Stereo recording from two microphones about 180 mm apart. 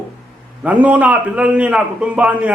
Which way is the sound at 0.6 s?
10° right (ahead or behind).